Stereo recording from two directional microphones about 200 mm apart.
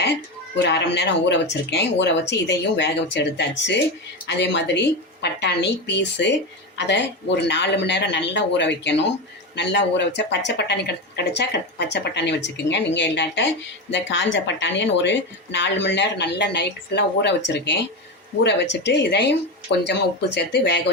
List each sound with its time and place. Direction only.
0.0 s a woman's voice: 60° left (ahead or behind)